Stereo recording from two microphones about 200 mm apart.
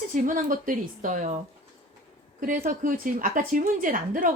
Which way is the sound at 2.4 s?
45° right (ahead or behind).